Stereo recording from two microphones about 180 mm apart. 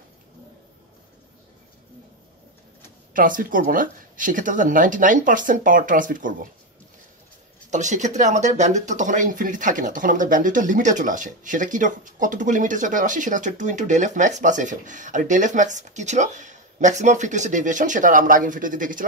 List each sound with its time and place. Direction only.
3.1 s speech: 50° right (ahead or behind)
7.7 s speech: 40° right (ahead or behind)